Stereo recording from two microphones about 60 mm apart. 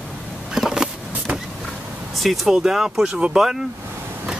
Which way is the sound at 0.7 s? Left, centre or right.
Centre.